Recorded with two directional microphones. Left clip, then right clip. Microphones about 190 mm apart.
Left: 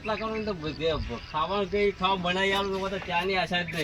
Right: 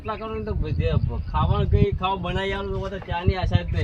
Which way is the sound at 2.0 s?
Centre (ahead or behind).